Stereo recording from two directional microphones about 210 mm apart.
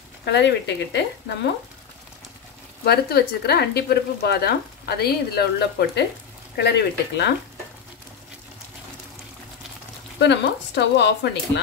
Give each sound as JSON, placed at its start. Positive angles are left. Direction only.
{"t": 0.2, "sound": "speech", "side_deg": 55}
{"t": 2.8, "sound": "speech", "side_deg": 50}
{"t": 10.1, "sound": "speech", "side_deg": 55}